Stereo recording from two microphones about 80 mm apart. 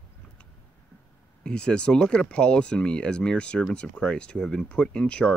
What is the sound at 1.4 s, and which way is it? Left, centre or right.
Speech, centre.